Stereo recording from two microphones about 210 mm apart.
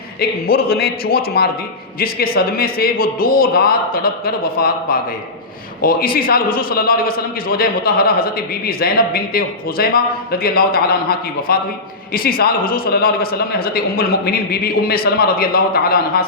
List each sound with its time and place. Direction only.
0.2 s a man's voice: 45° left (ahead or behind)
5.8 s a man's voice: 45° left (ahead or behind)